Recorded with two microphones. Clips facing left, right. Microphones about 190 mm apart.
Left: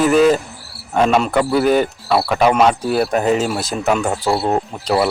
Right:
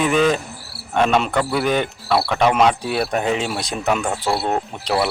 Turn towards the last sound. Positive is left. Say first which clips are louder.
# left 4 dB
turn(degrees=0)  # may be behind; listen again after turning